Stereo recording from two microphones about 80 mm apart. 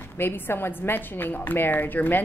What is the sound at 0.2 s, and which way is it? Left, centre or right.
A woman's voice, left.